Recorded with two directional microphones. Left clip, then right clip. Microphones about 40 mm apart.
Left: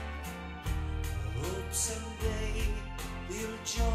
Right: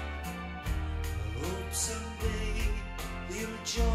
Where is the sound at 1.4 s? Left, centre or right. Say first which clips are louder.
Even; right.